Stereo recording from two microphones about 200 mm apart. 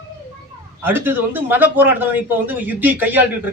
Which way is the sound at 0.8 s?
10° right (ahead or behind).